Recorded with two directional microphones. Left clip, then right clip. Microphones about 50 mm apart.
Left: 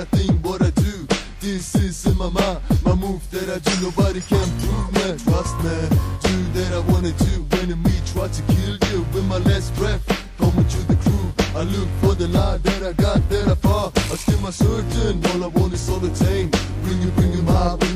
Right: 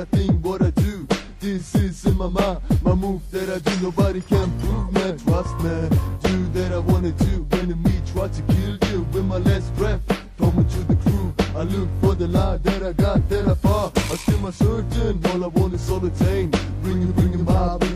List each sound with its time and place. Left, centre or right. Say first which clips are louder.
0.1 s music: left 1 dB; right